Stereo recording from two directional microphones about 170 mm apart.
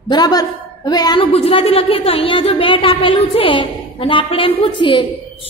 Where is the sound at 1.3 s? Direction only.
35° left (ahead or behind).